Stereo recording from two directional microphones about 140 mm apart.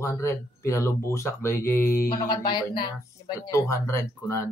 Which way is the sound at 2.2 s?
30° left (ahead or behind).